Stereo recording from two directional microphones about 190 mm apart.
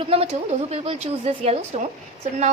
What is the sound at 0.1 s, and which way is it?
Speech, 30° right (ahead or behind).